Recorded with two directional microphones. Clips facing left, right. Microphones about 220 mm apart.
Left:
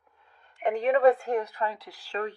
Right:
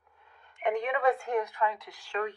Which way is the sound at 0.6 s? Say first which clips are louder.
Left 6 dB; 35° left (ahead or behind).